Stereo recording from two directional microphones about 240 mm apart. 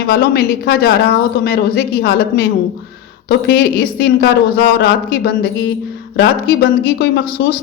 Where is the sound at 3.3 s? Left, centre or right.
Left.